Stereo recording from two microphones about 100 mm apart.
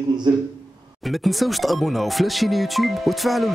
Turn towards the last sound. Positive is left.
turn(degrees=0)  # may be behind; listen again after turning